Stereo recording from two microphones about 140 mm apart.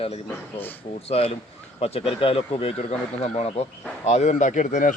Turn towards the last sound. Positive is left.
turn(degrees=65)  # may be behind; listen again after turning